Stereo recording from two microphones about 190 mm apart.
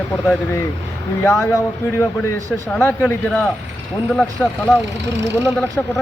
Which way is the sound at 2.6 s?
5° left (ahead or behind).